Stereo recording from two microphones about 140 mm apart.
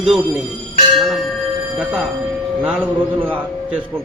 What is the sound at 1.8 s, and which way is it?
A man's voice, 10° right (ahead or behind).